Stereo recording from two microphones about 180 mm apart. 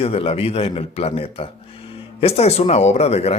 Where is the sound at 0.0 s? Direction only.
30° left (ahead or behind).